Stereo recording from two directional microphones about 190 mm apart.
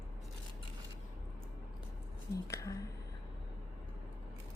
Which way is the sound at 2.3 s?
15° left (ahead or behind).